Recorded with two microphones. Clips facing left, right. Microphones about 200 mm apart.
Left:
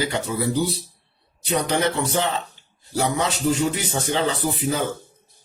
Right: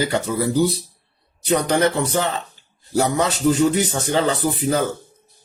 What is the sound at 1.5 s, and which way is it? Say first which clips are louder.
Speech: right 4 dB; 45° right (ahead or behind).